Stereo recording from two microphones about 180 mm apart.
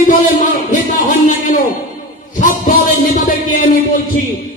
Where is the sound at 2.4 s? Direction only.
45° left (ahead or behind).